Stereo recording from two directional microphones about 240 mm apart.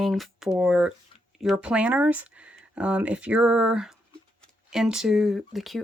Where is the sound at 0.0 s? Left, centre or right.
Centre.